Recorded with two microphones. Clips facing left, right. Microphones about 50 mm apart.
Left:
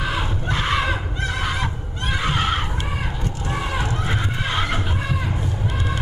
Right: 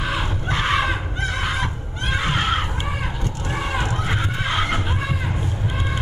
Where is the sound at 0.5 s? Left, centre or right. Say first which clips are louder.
Right 1 dB; right.